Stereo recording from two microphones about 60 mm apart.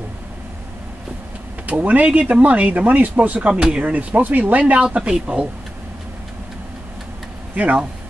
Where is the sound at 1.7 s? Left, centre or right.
Right.